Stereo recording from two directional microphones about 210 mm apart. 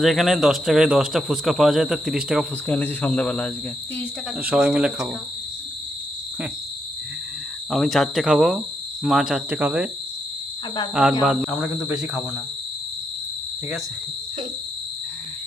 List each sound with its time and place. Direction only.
0.0 s speech: centre (ahead or behind)
4.4 s speech: 5° right (ahead or behind)
7.7 s speech: centre (ahead or behind)
11.3 s speech: 5° right (ahead or behind)